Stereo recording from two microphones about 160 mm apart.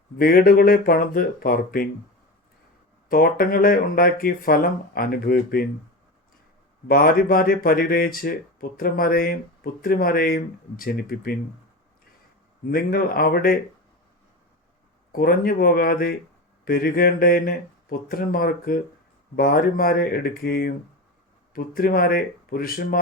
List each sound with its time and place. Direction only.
0.2 s speech: 65° left (ahead or behind)
3.1 s speech: 60° left (ahead or behind)
6.8 s speech: 70° left (ahead or behind)
12.6 s speech: 65° left (ahead or behind)
15.1 s speech: 70° left (ahead or behind)